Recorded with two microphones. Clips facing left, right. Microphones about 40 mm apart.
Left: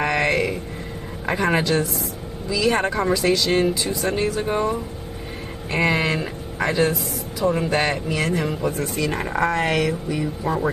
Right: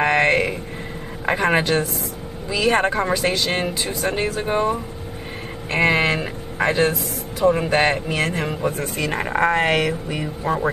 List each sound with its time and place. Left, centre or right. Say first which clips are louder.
0.0 s a sound: right 3 dB; right
1.4 s speech: right 1 dB; right
4.4 s speech: right 1 dB; right